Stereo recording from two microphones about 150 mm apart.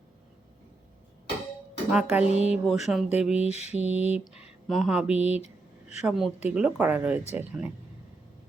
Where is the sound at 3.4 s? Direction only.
45° left (ahead or behind).